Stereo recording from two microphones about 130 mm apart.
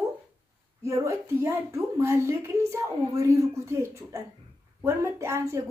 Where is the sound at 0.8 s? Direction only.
20° right (ahead or behind).